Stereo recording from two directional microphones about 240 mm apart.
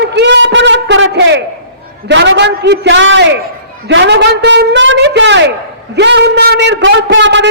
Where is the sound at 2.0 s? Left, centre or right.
Right.